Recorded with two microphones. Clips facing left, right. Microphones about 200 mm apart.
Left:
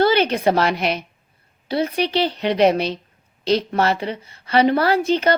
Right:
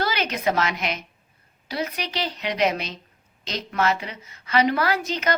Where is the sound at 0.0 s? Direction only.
30° left (ahead or behind).